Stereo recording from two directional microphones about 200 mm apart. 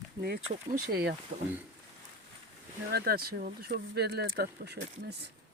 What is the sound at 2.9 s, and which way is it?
Speech, 50° right (ahead or behind).